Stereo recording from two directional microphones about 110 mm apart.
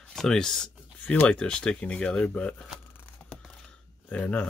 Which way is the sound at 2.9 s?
15° left (ahead or behind).